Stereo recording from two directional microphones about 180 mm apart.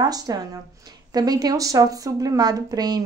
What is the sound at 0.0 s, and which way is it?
A woman's voice, 20° right (ahead or behind).